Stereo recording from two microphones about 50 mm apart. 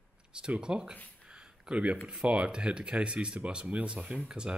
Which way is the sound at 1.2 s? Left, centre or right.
Centre.